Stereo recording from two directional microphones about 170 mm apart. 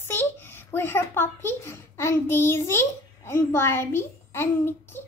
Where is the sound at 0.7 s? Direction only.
15° left (ahead or behind).